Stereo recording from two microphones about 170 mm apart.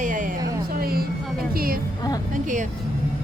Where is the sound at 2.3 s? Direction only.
50° right (ahead or behind).